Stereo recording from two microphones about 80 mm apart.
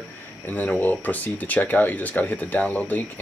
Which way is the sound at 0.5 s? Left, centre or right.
Left.